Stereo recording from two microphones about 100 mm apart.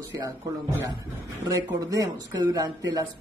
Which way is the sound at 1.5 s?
35° right (ahead or behind).